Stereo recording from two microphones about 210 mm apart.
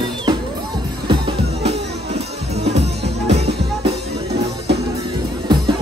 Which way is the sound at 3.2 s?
30° right (ahead or behind).